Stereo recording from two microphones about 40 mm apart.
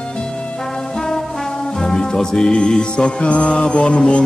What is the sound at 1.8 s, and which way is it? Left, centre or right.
Music, centre.